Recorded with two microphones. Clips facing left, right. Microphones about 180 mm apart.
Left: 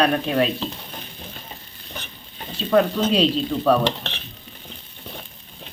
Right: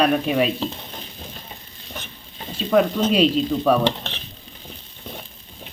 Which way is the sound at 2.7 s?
5° right (ahead or behind).